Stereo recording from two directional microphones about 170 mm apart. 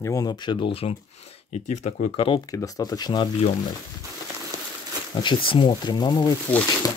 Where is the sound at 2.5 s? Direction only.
20° left (ahead or behind).